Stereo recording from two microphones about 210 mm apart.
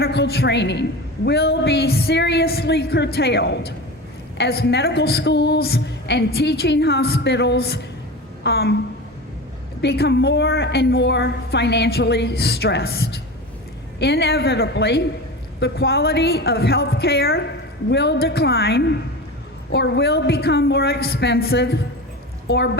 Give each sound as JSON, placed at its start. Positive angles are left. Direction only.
{"t": 0.0, "sound": "a woman's voice", "side_deg": 50}
{"t": 9.8, "sound": "a woman's voice", "side_deg": 50}